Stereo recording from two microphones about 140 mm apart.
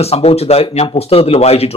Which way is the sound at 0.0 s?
45° left (ahead or behind).